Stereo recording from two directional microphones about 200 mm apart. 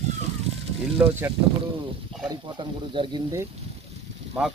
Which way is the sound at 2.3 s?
25° right (ahead or behind).